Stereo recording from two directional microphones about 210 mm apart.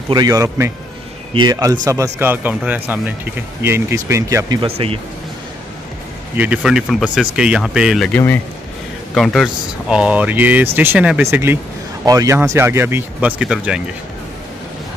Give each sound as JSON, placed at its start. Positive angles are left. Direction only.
{"t": 0.1, "sound": "speech", "side_deg": -15}
{"t": 6.3, "sound": "speech", "side_deg": -5}